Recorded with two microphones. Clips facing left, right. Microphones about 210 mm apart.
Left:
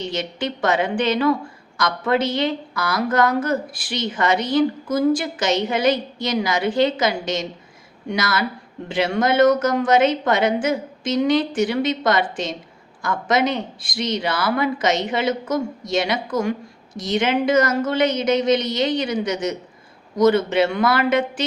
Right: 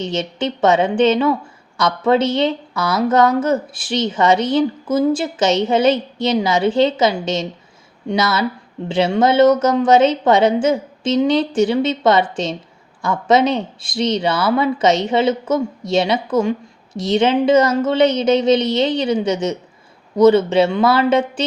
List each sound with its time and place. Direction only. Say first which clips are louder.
0.0 s speech: right 4 dB; 25° right (ahead or behind)
8.9 s speech: right 4 dB; 25° right (ahead or behind)